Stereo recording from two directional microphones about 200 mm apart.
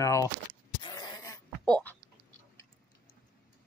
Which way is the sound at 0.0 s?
15° left (ahead or behind).